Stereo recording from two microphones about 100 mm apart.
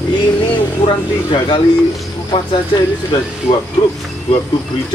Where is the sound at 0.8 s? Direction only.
55° left (ahead or behind).